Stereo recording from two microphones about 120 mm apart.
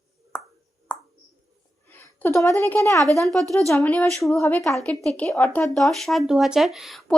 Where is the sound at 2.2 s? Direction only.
25° left (ahead or behind).